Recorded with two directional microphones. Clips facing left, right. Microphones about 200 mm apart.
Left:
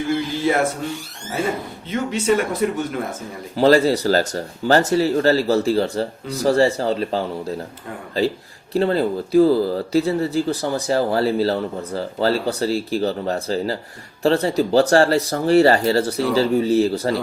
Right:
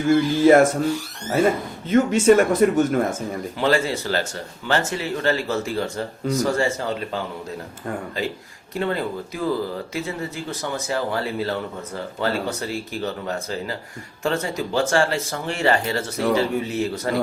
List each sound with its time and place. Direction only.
1.9 s speech: 45° right (ahead or behind)
3.5 s speech: 35° left (ahead or behind)